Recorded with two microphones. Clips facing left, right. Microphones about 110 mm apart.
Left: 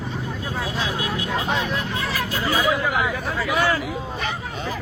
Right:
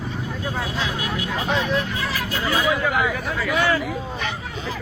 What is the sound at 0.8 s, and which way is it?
Speech, 30° left (ahead or behind).